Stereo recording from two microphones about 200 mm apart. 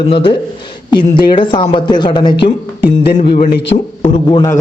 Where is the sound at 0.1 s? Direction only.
25° left (ahead or behind).